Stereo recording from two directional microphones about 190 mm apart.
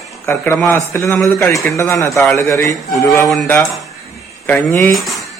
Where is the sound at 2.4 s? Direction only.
15° left (ahead or behind).